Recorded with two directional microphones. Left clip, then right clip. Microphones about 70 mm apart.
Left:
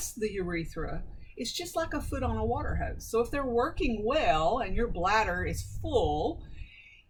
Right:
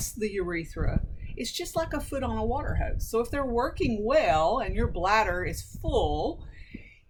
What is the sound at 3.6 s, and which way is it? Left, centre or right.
Speech, centre.